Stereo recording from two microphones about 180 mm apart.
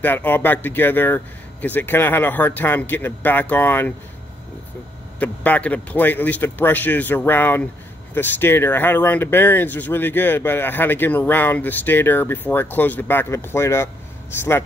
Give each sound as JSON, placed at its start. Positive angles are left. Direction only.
{"t": 0.0, "sound": "speech", "side_deg": 10}
{"t": 5.2, "sound": "speech", "side_deg": 10}